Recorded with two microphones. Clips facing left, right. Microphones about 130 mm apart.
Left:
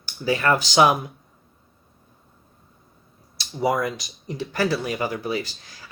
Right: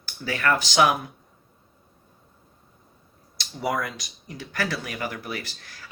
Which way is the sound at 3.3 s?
20° left (ahead or behind).